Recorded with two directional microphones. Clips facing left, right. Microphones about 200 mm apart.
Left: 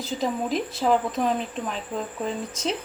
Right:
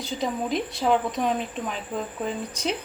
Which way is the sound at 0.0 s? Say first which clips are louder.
Left 1 dB; centre (ahead or behind).